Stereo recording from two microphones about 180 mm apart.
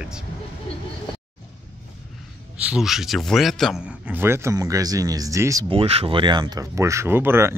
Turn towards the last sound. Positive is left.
turn(degrees=-15)  # may be behind; listen again after turning